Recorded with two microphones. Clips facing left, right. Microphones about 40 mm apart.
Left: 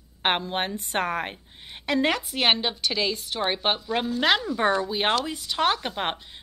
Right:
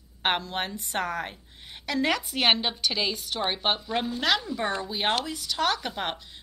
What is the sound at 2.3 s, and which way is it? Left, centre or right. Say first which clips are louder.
A woman's voice: left 1 dB; centre.